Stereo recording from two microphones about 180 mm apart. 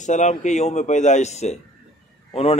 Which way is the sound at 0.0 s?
40° left (ahead or behind).